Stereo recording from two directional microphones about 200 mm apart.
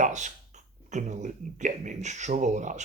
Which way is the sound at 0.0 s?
40° right (ahead or behind).